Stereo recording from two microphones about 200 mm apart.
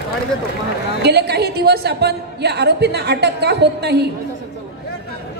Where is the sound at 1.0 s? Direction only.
55° right (ahead or behind).